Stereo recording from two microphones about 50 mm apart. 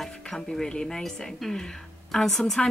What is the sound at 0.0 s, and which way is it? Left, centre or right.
A woman's voice, centre.